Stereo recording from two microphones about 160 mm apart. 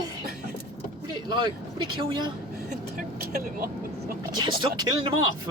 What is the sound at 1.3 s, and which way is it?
Speech, 30° right (ahead or behind).